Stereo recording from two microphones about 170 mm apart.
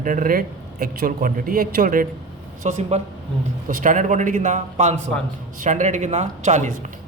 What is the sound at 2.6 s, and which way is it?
A man's voice, 45° right (ahead or behind).